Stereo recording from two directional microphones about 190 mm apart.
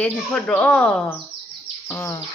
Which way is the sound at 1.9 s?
10° left (ahead or behind).